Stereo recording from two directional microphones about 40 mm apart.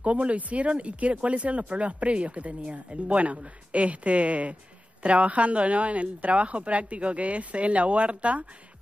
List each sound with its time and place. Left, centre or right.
0.0 s speech: right